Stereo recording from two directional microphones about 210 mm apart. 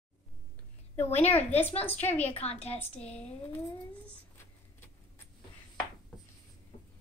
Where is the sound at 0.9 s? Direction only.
10° left (ahead or behind).